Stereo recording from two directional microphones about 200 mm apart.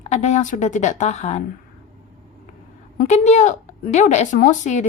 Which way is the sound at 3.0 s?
35° left (ahead or behind).